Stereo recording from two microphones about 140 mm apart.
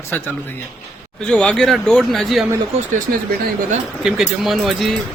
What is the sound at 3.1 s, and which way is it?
Speech, 90° right.